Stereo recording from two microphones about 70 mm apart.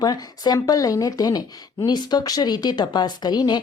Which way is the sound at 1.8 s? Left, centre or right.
Left.